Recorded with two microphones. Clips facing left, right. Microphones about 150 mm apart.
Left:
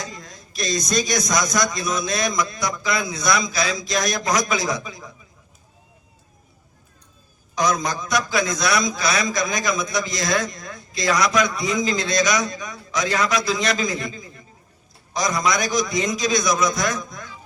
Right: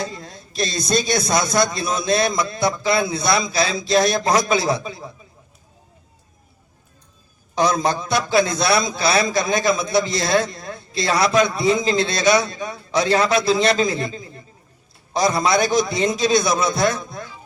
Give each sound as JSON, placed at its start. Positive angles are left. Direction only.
{"t": 0.0, "sound": "a man's voice", "side_deg": -30}
{"t": 7.5, "sound": "a man's voice", "side_deg": -30}